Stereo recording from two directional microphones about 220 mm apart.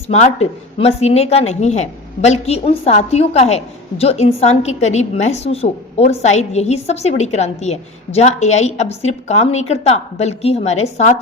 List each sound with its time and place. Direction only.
0.1 s a woman's voice: 30° left (ahead or behind)